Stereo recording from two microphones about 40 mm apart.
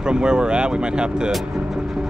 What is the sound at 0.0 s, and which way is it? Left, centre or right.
Speech, right.